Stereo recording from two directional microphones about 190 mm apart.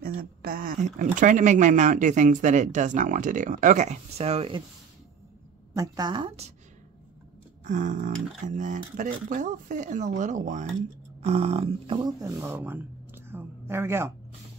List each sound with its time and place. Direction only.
0.0 s speech: 50° right (ahead or behind); by 4.6 s 30° right (ahead or behind)
5.8 s a woman's voice: 20° right (ahead or behind)
7.6 s speech: 40° right (ahead or behind); by 14.1 s 15° right (ahead or behind)